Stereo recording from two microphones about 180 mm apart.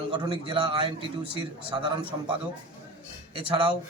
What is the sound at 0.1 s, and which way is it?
A man's voice, 30° right (ahead or behind).